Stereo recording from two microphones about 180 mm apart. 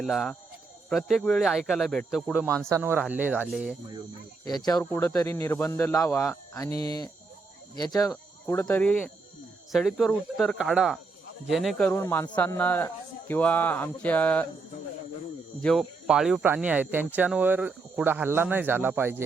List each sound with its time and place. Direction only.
0.0 s speech: centre (ahead or behind)
2.6 s speech: 15° right (ahead or behind)
4.4 s speech: 20° left (ahead or behind)
7.8 s speech: 20° left (ahead or behind)
8.1 s speech: 10° left (ahead or behind)
11.9 s speech: 15° left (ahead or behind)
12.4 s speech: 10° left (ahead or behind)
15.6 s speech: centre (ahead or behind)